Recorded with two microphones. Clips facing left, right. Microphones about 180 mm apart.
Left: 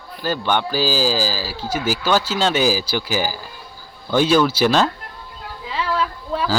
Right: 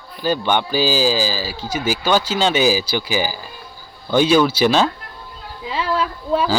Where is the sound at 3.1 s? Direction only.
45° left (ahead or behind).